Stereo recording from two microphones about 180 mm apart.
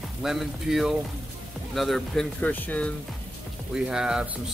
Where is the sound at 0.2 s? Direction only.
Centre (ahead or behind).